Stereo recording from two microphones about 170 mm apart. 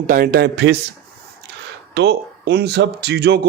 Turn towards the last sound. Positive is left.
turn(degrees=-70)  # may be behind; listen again after turning